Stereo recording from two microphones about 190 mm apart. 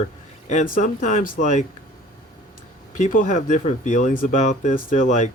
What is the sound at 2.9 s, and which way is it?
Speech, 45° left (ahead or behind).